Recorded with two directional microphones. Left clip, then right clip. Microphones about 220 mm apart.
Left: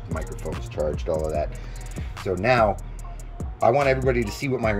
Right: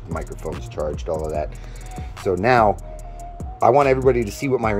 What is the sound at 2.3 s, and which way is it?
Speech, 15° right (ahead or behind).